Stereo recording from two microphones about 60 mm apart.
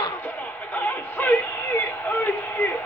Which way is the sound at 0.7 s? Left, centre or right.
Left.